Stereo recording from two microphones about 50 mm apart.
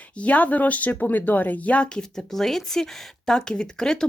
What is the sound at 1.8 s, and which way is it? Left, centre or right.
Speech, centre.